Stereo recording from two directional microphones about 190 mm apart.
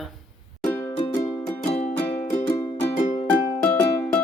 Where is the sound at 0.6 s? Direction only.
15° left (ahead or behind).